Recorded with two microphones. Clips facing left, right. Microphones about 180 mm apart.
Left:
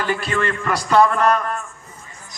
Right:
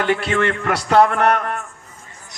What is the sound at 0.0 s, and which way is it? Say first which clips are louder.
A man's voice: right 3 dB; 65° right (ahead or behind).